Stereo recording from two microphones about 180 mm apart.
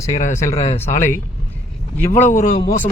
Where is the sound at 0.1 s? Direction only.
40° left (ahead or behind).